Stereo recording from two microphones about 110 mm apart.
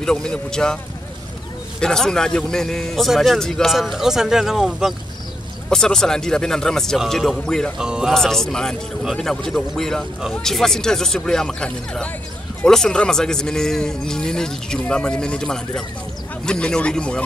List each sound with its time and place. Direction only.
0.0 s speech: 5° left (ahead or behind)
1.8 s speech: 5° left (ahead or behind)
7.8 s speech: 5° right (ahead or behind)